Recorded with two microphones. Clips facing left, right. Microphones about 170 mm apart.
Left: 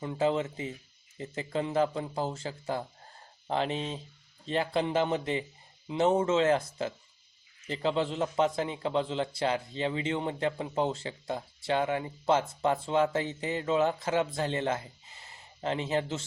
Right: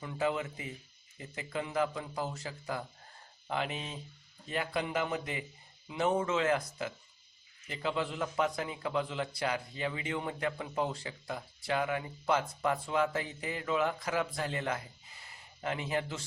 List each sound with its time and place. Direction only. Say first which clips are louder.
0.0 s a man's voice: left 5 dB; 30° left (ahead or behind)